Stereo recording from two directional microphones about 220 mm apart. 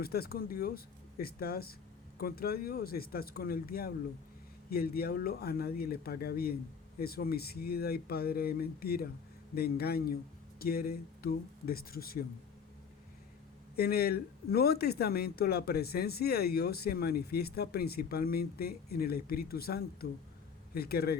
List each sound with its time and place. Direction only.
0.0 s speech: 45° left (ahead or behind)
13.7 s speech: 45° left (ahead or behind)